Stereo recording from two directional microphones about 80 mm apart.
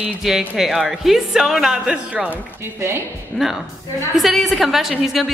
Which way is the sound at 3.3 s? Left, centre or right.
Centre.